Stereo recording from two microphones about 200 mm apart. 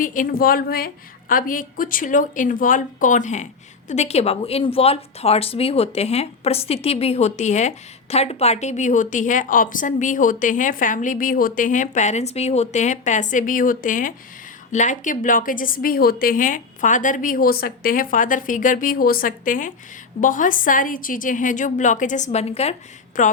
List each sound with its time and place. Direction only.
0.0 s a woman's voice: 40° left (ahead or behind)